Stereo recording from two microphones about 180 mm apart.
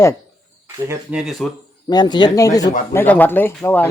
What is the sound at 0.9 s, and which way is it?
Speech, 5° right (ahead or behind).